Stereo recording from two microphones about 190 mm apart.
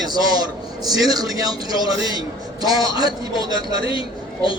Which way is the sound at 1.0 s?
20° right (ahead or behind).